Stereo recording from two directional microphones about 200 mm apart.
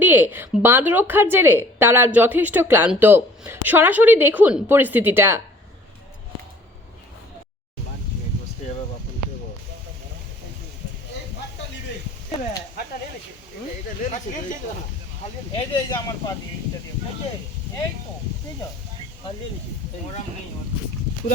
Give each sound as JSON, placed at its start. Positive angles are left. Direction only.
{"t": 0.0, "sound": "speech", "side_deg": -10}
{"t": 14.0, "sound": "speech", "side_deg": 40}
{"t": 15.5, "sound": "speech", "side_deg": 20}